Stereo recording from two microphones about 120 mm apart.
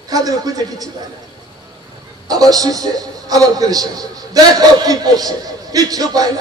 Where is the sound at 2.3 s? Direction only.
30° right (ahead or behind).